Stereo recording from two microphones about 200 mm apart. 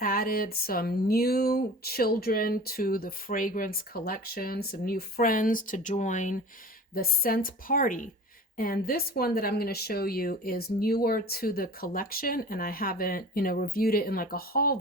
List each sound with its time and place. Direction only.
0.0 s speech: 45° left (ahead or behind)
6.9 s speech: 50° left (ahead or behind)